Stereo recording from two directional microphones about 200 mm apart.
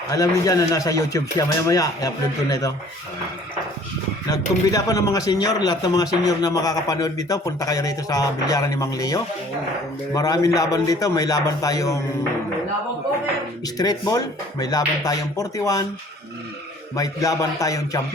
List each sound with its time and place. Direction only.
0.1 s speech: 15° left (ahead or behind)
4.3 s speech: 15° left (ahead or behind)
13.7 s speech: 20° left (ahead or behind)
16.9 s speech: 15° left (ahead or behind)